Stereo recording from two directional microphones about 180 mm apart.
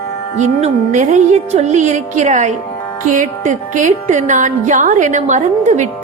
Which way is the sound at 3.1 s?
45° right (ahead or behind).